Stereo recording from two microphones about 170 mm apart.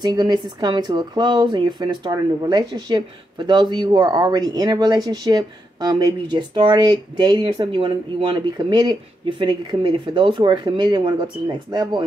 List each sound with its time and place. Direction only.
0.0 s speech: 25° right (ahead or behind)